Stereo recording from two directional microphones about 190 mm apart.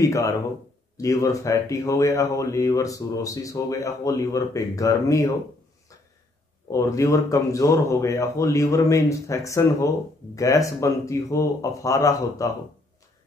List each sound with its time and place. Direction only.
0.0 s speech: 15° left (ahead or behind)
6.7 s speech: 15° left (ahead or behind)